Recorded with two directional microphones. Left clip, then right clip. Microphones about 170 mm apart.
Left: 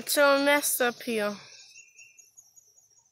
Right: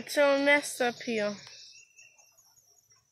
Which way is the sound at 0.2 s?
25° left (ahead or behind).